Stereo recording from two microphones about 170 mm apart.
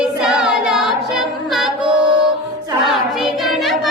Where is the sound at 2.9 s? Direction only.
Centre (ahead or behind).